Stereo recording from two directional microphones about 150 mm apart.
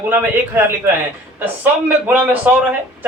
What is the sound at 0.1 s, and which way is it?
Speech, 10° right (ahead or behind).